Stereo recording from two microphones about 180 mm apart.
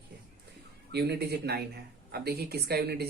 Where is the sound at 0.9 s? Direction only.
65° right (ahead or behind).